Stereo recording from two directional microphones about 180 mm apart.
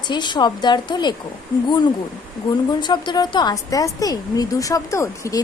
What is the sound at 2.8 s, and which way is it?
Speech, 25° left (ahead or behind).